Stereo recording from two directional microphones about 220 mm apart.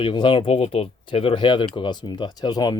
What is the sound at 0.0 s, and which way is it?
Speech, 20° left (ahead or behind).